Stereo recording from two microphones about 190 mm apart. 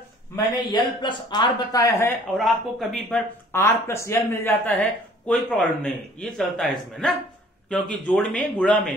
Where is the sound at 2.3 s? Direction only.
Centre (ahead or behind).